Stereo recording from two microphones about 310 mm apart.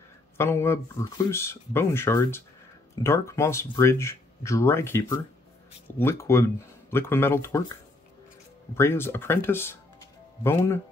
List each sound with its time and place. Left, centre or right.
0.4 s speech: centre
8.7 s speech: centre